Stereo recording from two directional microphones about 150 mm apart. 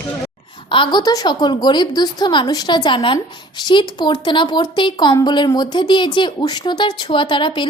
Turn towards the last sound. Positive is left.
turn(degrees=35)  # may be behind; listen again after turning